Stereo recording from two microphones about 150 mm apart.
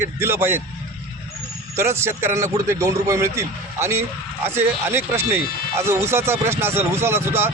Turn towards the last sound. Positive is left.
turn(degrees=-15)  # may be behind; listen again after turning